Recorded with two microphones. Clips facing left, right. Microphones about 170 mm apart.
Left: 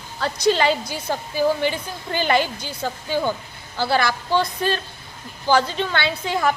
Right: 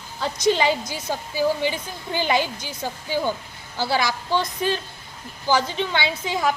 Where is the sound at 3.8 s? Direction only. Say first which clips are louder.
Left 2 dB; 55° left (ahead or behind).